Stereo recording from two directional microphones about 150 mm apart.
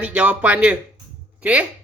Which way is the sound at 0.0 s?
10° right (ahead or behind).